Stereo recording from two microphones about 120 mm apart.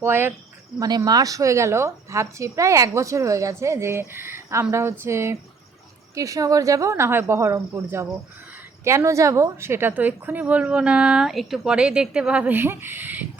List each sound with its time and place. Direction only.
0.0 s speech: 20° right (ahead or behind)
0.8 s a woman's voice: 35° right (ahead or behind); by 13.2 s 15° right (ahead or behind)